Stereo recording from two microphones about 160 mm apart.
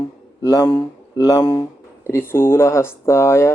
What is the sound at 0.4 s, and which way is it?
Speech, 15° left (ahead or behind).